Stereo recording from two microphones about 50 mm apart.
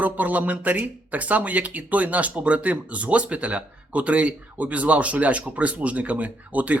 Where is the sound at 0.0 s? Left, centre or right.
Right.